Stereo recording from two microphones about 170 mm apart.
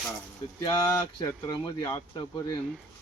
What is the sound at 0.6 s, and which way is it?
Speech, 25° left (ahead or behind).